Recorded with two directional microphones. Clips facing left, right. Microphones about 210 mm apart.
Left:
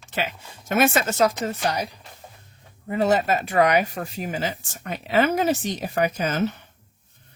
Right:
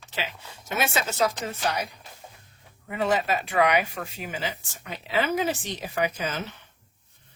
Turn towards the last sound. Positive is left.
turn(degrees=45)  # may be behind; listen again after turning